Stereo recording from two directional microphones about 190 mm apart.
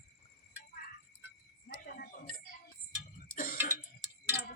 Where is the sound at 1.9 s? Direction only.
50° left (ahead or behind).